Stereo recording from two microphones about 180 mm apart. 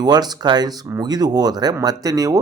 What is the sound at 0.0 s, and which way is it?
Speech, 20° right (ahead or behind).